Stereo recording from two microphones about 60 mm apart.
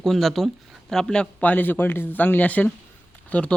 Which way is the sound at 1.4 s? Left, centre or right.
Left.